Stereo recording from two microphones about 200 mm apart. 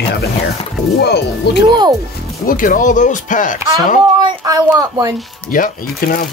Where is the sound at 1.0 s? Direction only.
55° left (ahead or behind).